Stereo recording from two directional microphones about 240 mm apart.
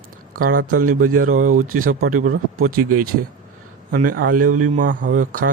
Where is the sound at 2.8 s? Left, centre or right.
Right.